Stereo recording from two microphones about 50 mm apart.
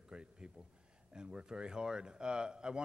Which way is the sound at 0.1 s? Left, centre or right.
Centre.